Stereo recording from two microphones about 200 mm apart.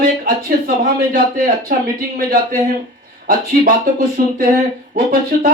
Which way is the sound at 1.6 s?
45° right (ahead or behind).